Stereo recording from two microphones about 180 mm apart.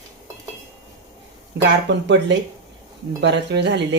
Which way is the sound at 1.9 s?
75° right (ahead or behind).